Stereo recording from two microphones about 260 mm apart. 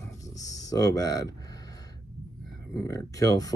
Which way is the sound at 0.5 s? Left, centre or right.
Centre.